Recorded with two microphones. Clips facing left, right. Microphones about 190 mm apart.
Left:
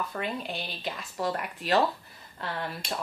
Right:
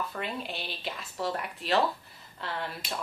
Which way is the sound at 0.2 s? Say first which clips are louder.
Left 2 dB; 45° left (ahead or behind).